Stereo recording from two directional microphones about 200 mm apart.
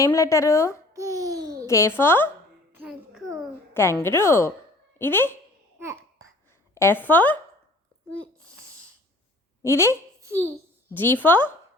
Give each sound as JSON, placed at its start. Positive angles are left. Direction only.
{"t": 0.0, "sound": "a woman's voice", "side_deg": 15}
{"t": 0.9, "sound": "babbling", "side_deg": -15}
{"t": 1.6, "sound": "a woman's voice", "side_deg": 15}
{"t": 2.7, "sound": "a sound", "side_deg": -5}
{"t": 3.8, "sound": "a woman's voice", "side_deg": 10}
{"t": 6.7, "sound": "a woman's voice", "side_deg": 10}
{"t": 9.6, "sound": "a woman's voice", "side_deg": 15}
{"t": 10.2, "sound": "a sound", "side_deg": -15}
{"t": 10.9, "sound": "a woman's voice", "side_deg": 10}